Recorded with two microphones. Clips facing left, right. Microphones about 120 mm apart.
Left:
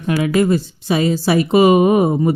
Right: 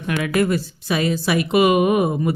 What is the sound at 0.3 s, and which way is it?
Speech, 25° left (ahead or behind).